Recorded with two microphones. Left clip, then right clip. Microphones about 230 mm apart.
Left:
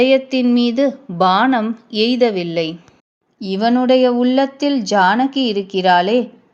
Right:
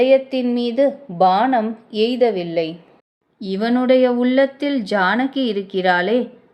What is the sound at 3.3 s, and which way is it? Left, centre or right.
Speech, centre.